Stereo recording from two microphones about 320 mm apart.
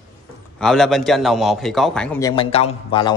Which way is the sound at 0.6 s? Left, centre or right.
Centre.